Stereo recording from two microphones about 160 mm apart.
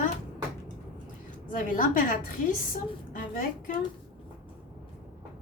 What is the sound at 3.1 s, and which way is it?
Speech, 60° left (ahead or behind).